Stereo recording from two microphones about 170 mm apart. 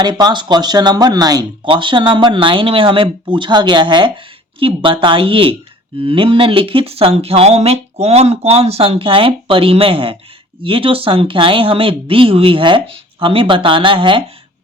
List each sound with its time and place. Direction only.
0.0 s speech: 25° right (ahead or behind)